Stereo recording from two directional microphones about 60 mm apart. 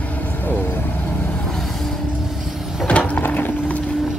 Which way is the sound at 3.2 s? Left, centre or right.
Left.